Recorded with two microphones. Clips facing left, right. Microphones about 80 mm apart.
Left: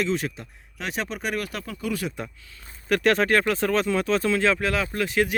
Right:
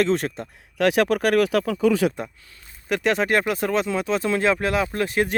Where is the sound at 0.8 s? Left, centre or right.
Right.